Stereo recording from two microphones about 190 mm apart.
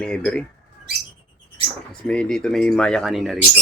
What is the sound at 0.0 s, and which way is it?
Speech, 5° left (ahead or behind).